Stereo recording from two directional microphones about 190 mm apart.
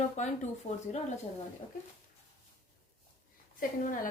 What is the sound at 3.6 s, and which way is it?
Speech, 45° left (ahead or behind).